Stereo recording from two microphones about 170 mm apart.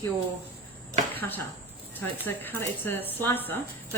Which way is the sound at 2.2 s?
10° left (ahead or behind).